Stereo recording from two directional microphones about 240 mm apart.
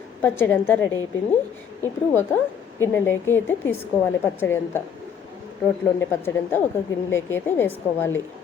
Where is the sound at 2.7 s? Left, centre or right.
Centre.